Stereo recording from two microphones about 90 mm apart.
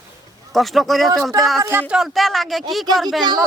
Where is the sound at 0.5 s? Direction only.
Centre (ahead or behind).